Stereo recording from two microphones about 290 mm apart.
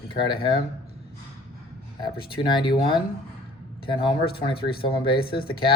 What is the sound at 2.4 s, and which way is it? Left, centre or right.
Speech, centre.